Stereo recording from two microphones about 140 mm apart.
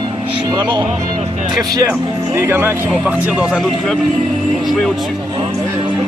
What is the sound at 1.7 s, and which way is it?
Speech, 25° right (ahead or behind).